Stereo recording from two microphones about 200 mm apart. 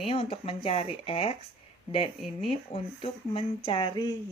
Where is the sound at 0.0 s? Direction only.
30° left (ahead or behind).